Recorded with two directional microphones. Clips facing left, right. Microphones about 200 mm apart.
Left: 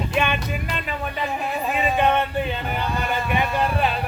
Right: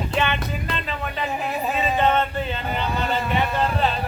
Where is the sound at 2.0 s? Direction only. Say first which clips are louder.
Even; 15° left (ahead or behind).